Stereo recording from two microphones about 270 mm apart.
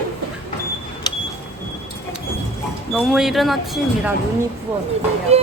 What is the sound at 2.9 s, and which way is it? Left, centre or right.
Speech, centre.